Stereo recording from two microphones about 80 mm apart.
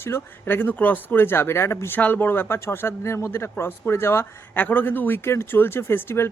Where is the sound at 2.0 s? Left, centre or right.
Left.